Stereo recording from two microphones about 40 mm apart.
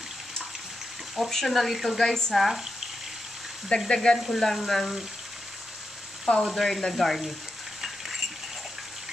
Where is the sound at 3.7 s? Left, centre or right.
Left.